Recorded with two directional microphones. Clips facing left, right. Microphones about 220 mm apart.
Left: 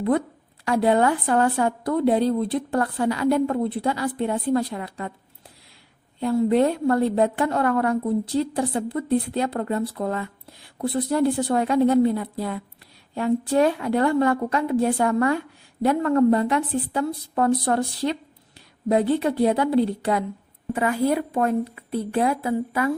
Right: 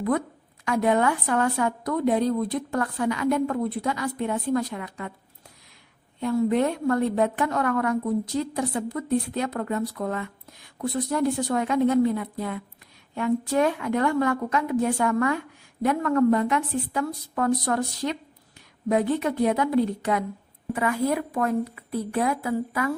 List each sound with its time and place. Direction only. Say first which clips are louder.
0.6 s a woman's voice: left 3 dB; 35° left (ahead or behind)
6.1 s a woman's voice: left 3 dB; 30° left (ahead or behind)